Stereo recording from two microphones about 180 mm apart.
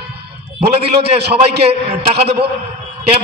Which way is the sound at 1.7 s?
35° right (ahead or behind).